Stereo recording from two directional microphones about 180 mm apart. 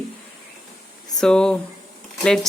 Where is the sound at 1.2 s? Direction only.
5° left (ahead or behind).